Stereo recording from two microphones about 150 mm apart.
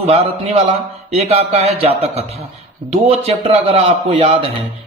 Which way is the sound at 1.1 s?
45° right (ahead or behind).